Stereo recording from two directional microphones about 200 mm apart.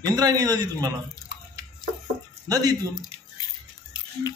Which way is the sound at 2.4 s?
20° right (ahead or behind).